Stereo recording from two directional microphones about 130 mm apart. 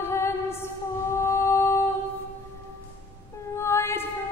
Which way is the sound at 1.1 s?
20° left (ahead or behind).